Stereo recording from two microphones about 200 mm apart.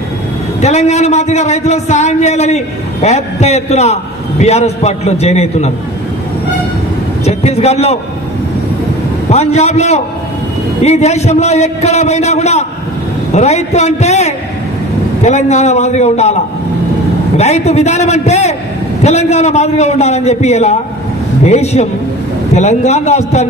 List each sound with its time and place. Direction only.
0.6 s a man's voice: 35° left (ahead or behind)
7.2 s a man's voice: 30° left (ahead or behind)
9.3 s a man's voice: 35° left (ahead or behind)
17.4 s a man's voice: 35° left (ahead or behind)